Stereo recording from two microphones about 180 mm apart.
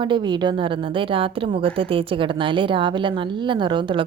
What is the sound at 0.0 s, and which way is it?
A woman's voice, 25° right (ahead or behind).